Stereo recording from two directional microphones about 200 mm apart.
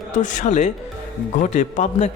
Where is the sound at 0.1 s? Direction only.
40° left (ahead or behind).